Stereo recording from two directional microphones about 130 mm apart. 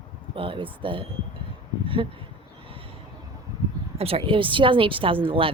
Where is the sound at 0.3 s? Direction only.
40° right (ahead or behind).